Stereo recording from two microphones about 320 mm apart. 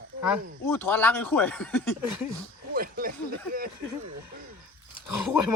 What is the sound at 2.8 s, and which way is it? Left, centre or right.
Speech, right.